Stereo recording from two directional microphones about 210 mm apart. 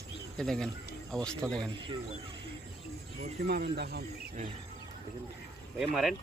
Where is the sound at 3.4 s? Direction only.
45° right (ahead or behind).